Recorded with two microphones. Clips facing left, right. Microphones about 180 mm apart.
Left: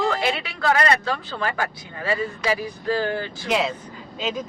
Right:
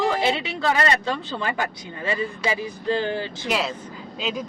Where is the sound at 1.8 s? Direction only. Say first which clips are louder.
Left 1 dB; 20° right (ahead or behind).